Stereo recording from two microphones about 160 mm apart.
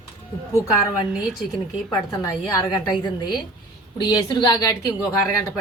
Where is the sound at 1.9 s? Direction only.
20° left (ahead or behind).